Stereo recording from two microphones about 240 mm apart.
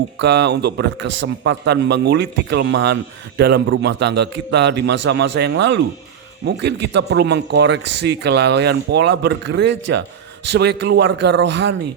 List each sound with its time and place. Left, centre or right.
0.2 s speech: right